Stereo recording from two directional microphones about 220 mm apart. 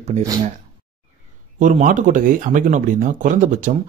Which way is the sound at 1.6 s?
35° right (ahead or behind).